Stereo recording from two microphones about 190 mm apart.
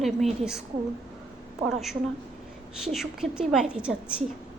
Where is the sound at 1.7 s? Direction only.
Centre (ahead or behind).